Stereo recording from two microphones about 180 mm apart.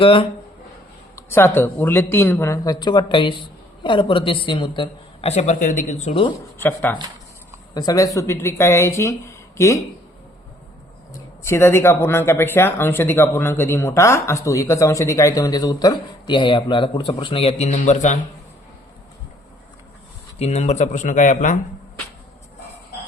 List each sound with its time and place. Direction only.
0.0 s speech: 30° left (ahead or behind)
1.1 s speech: 10° left (ahead or behind); by 6.2 s 40° left (ahead or behind)
6.6 s speech: 10° left (ahead or behind)
7.7 s speech: 20° left (ahead or behind)
11.4 s speech: 15° left (ahead or behind); by 18.2 s 40° left (ahead or behind)
20.4 s speech: 35° left (ahead or behind)